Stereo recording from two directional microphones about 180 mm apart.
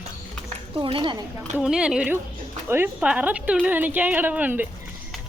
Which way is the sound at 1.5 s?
5° right (ahead or behind).